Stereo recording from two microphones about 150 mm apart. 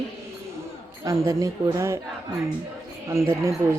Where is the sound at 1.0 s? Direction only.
20° right (ahead or behind).